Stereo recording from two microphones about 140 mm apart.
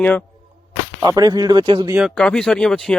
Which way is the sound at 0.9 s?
25° right (ahead or behind).